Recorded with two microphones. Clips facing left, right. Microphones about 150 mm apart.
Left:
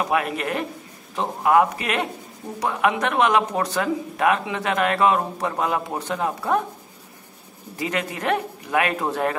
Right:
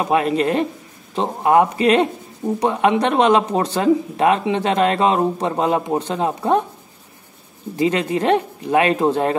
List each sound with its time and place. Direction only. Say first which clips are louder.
0.0 s speech: right 6 dB; 25° right (ahead or behind)
7.7 s speech: right 8 dB; 25° right (ahead or behind)